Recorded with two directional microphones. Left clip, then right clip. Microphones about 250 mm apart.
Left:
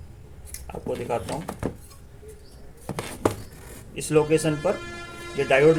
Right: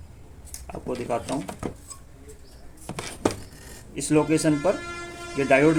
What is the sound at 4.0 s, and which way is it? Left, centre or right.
Speech, right.